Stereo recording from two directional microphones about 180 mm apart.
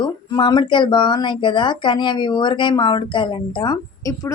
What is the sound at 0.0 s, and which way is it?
Speech, 25° left (ahead or behind).